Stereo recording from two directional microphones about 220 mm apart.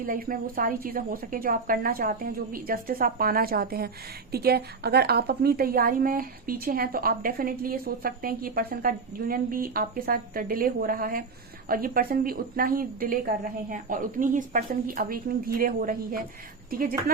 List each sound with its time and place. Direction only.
0.0 s a woman's voice: 40° right (ahead or behind)